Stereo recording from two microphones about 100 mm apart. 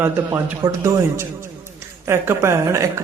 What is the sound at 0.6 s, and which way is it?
A man's voice, 35° right (ahead or behind).